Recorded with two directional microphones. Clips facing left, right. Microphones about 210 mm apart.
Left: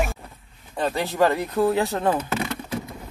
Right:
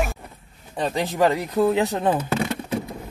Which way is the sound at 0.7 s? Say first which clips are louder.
Even; 15° right (ahead or behind).